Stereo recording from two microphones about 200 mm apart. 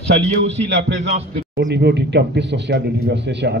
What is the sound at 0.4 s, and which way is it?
Speech, 65° right (ahead or behind).